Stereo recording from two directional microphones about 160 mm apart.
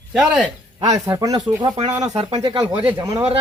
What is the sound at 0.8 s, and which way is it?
Speech, 25° right (ahead or behind).